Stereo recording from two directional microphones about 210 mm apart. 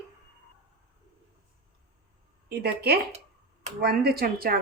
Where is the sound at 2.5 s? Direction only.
50° right (ahead or behind).